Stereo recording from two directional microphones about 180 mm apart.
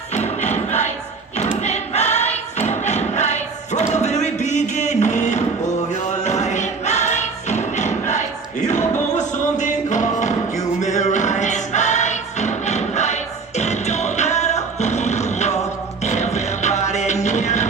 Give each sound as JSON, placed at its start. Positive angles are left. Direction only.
{"t": 0.1, "sound": "music", "side_deg": 40}
{"t": 1.6, "sound": "choir", "side_deg": 40}
{"t": 8.6, "sound": "music", "side_deg": 40}